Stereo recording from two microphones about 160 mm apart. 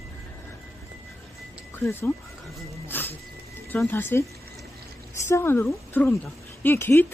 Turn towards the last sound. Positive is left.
turn(degrees=15)  # may be behind; listen again after turning